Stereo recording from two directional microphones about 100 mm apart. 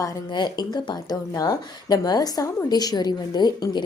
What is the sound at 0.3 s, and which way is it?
A woman's voice, 45° left (ahead or behind).